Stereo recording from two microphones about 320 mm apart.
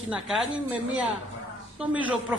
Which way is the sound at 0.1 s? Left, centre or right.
Centre.